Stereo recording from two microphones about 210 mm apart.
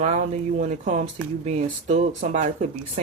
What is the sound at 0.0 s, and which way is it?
Speech, 35° right (ahead or behind).